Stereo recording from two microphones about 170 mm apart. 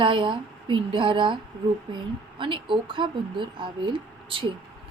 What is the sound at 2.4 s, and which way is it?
Speech, 30° right (ahead or behind).